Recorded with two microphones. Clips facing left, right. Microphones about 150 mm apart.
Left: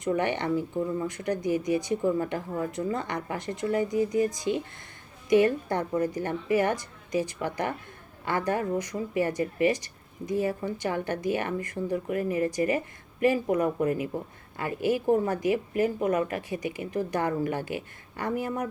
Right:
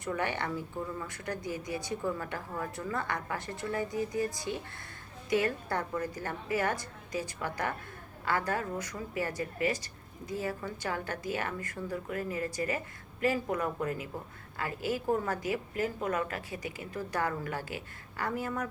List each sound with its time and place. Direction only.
0.2 s a woman's voice: 20° left (ahead or behind)
2.1 s a woman's voice: 30° left (ahead or behind)